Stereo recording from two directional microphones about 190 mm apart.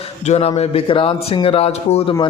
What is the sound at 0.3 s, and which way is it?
A man's voice, 35° left (ahead or behind).